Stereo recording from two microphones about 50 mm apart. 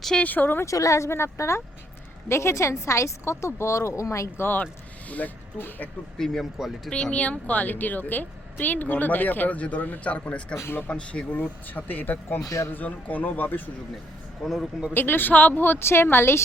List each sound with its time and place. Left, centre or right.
0.2 s a woman's voice: left
0.6 s a woman's voice: left
4.4 s a woman's voice: left
6.1 s speech: centre
6.9 s speech: centre
7.2 s a woman's voice: left
10.6 s speech: left
10.8 s a woman's voice: left
14.4 s speech: centre
14.9 s speech: left